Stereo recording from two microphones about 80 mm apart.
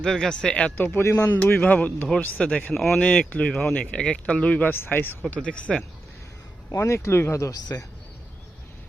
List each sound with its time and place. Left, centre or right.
0.0 s speech: centre
0.9 s speech: left; by 2.7 s centre
2.7 s speech: centre
3.0 s speech: centre
3.5 s speech: centre
3.8 s speech: centre
5.3 s speech: centre
6.7 s speech: left